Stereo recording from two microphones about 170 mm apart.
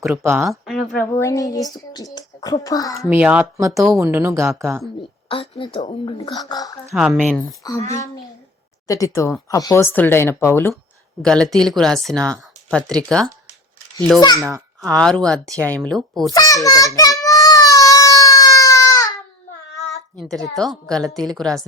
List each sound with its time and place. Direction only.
0.1 s speech: 15° right (ahead or behind)
0.4 s speech: centre (ahead or behind)
1.1 s a child's voice: 15° left (ahead or behind)
3.1 s speech: 10° right (ahead or behind)
5.3 s a woman's voice: 30° left (ahead or behind)
6.9 s speech: 5° right (ahead or behind)
7.6 s a child's voice: 20° left (ahead or behind)
8.9 s speech: 20° left (ahead or behind)
14.2 s a child's voice: 25° left (ahead or behind)
14.8 s speech: 5° left (ahead or behind)
16.3 s a child's voice: 20° left (ahead or behind)
17.2 s baby cry: 20° left (ahead or behind)
20.5 s speech: centre (ahead or behind)